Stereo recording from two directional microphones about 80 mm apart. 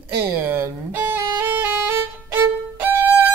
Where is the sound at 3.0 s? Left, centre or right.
Centre.